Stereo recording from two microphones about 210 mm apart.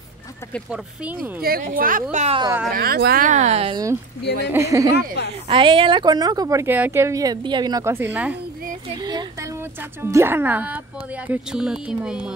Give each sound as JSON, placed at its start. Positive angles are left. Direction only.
{"t": 1.4, "sound": "speech", "side_deg": -45}
{"t": 2.1, "sound": "speech", "side_deg": -30}
{"t": 2.7, "sound": "speech", "side_deg": -45}
{"t": 4.5, "sound": "a woman's voice", "side_deg": -15}
{"t": 4.9, "sound": "speech", "side_deg": 50}
{"t": 5.5, "sound": "a woman's voice", "side_deg": -25}
{"t": 8.9, "sound": "a sound", "side_deg": -20}
{"t": 10.0, "sound": "a woman's voice", "side_deg": -10}